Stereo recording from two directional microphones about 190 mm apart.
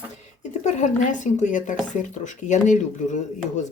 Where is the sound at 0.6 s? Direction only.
40° left (ahead or behind).